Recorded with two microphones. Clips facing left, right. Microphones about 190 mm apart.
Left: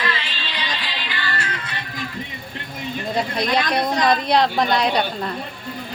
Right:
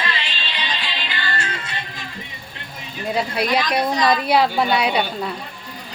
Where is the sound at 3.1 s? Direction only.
10° right (ahead or behind).